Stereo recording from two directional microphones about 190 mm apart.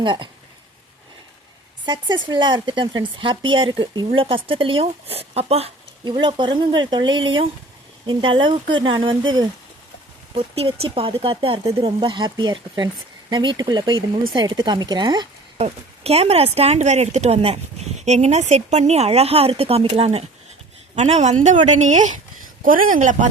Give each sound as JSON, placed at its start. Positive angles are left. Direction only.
{"t": 0.0, "sound": "speech", "side_deg": -25}
{"t": 1.8, "sound": "speech", "side_deg": -25}
{"t": 15.6, "sound": "speech", "side_deg": -35}